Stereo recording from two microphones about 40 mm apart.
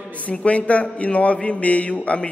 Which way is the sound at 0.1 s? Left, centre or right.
Left.